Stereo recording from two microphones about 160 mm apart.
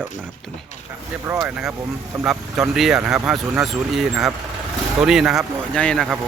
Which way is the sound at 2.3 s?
5° right (ahead or behind).